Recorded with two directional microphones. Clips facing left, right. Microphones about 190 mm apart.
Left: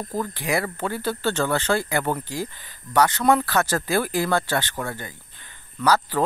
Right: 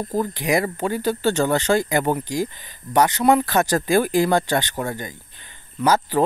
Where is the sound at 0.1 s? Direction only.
15° right (ahead or behind).